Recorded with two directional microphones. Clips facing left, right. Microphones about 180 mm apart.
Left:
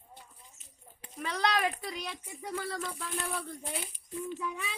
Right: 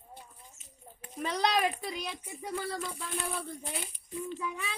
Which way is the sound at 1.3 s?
20° right (ahead or behind).